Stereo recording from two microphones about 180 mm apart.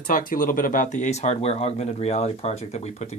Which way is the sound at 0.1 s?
50° left (ahead or behind).